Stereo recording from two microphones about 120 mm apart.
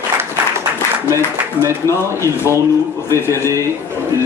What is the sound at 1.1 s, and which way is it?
Speech, 25° right (ahead or behind).